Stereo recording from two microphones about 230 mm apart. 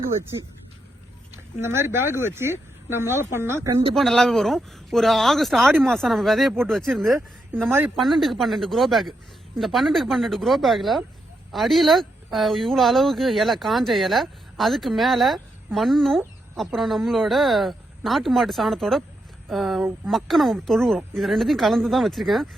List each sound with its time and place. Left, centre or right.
1.5 s speech: centre
3.9 s speech: centre